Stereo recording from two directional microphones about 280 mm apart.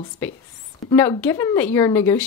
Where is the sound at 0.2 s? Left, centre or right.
Centre.